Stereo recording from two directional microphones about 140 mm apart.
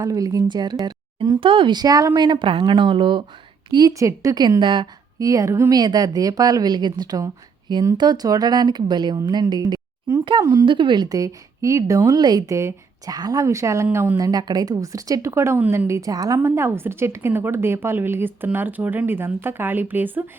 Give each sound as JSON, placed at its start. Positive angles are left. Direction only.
{"t": 0.0, "sound": "a woman's voice", "side_deg": -25}
{"t": 10.7, "sound": "a woman's voice", "side_deg": -35}